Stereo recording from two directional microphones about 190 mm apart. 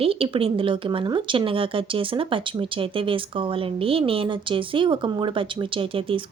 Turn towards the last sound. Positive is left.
turn(degrees=-30)  # may be behind; listen again after turning